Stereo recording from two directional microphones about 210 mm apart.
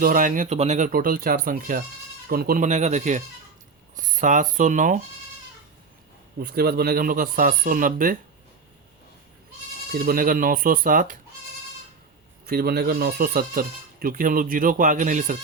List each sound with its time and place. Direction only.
0.0 s speech: 40° right (ahead or behind)
0.9 s speech: 45° right (ahead or behind)
6.4 s speech: 50° right (ahead or behind)
9.9 s speech: 45° right (ahead or behind)
12.5 s speech: 50° right (ahead or behind)